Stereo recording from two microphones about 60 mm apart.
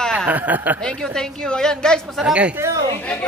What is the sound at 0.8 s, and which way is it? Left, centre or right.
Speech, centre.